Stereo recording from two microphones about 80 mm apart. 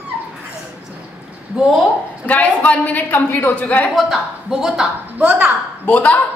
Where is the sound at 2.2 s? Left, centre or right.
Centre.